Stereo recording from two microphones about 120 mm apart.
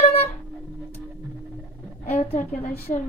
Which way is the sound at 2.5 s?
20° left (ahead or behind).